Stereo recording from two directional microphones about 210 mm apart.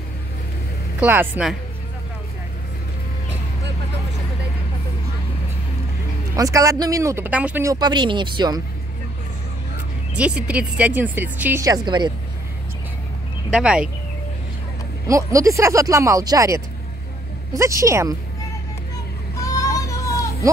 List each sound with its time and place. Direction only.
1.0 s speech: 10° right (ahead or behind)
6.3 s speech: 15° right (ahead or behind)
10.1 s speech: 5° right (ahead or behind); by 12.1 s 20° right (ahead or behind)
13.5 s speech: 5° right (ahead or behind)
15.0 s speech: 15° right (ahead or behind)
19.4 s child singing: 15° left (ahead or behind)